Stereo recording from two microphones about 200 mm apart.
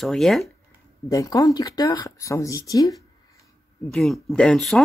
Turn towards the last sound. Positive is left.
turn(degrees=0)  # may be behind; listen again after turning